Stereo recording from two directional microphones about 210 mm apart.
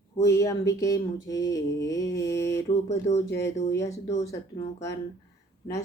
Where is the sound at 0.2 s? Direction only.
15° left (ahead or behind).